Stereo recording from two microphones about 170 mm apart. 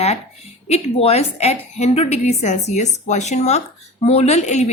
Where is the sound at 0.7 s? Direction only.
35° left (ahead or behind).